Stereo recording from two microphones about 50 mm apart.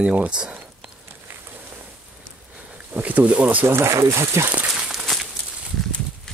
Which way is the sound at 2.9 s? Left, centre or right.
Right.